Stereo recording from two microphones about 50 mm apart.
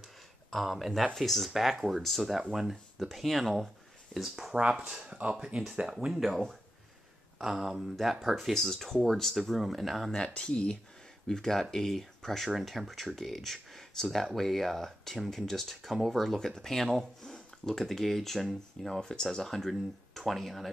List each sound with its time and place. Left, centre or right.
0.5 s speech: centre
4.7 s speech: centre
6.0 s speech: centre
10.1 s speech: centre
18.9 s speech: centre